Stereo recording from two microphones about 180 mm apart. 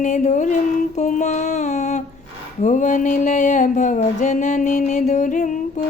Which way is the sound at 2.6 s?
45° left (ahead or behind).